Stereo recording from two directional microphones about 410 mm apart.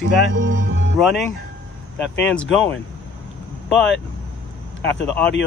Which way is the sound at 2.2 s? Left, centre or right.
Centre.